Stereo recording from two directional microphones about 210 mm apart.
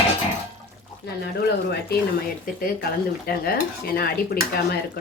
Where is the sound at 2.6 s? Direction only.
45° left (ahead or behind).